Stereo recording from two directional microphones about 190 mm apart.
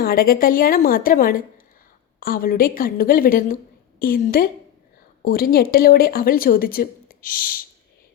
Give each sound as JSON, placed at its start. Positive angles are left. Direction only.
{"t": 0.0, "sound": "speech", "side_deg": 50}